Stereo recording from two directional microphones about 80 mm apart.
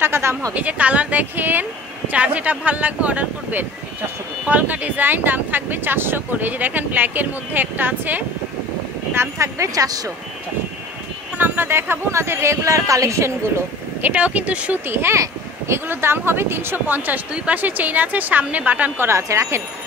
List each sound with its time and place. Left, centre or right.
0.0 s speech: right
0.6 s speech: centre
9.1 s speech: right
11.3 s speech: right
14.0 s speech: centre
14.9 s speech: right
19.0 s speech: right